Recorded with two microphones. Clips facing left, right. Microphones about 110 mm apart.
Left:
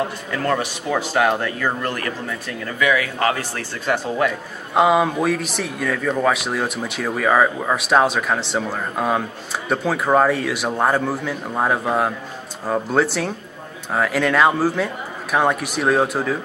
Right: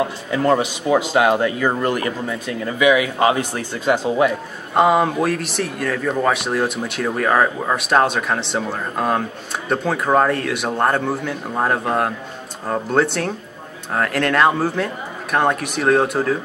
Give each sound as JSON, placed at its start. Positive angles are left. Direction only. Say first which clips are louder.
{"t": 0.3, "sound": "speech", "louder": "right 6 dB", "side_deg": -20}
{"t": 4.7, "sound": "speech", "louder": "right 1 dB", "side_deg": 0}